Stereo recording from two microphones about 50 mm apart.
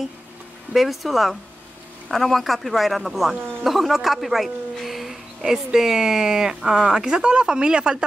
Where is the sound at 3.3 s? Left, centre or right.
Right.